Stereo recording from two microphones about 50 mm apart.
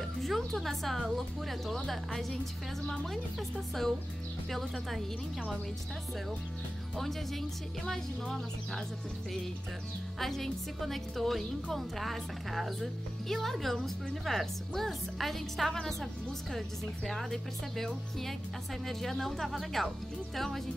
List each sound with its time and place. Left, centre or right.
0.0 s speech: centre
2.9 s speech: centre
7.0 s speech: centre
10.1 s speech: centre